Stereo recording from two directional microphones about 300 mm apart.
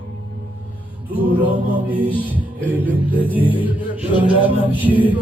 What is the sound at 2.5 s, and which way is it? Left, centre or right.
Music, centre.